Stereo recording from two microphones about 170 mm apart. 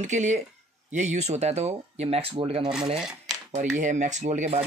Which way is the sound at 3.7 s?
45° right (ahead or behind).